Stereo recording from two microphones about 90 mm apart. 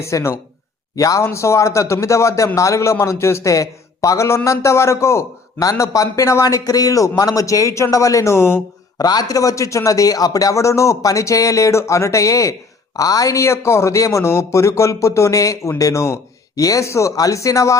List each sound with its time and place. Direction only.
0.0 s a man's voice: 30° left (ahead or behind)
9.0 s a man's voice: 45° left (ahead or behind)